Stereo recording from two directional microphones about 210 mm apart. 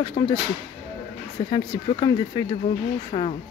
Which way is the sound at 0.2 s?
25° left (ahead or behind).